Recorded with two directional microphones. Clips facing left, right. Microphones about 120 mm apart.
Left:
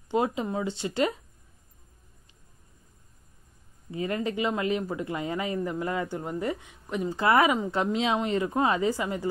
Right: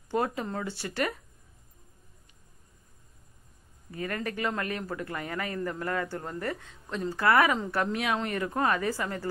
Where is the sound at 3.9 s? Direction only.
20° left (ahead or behind).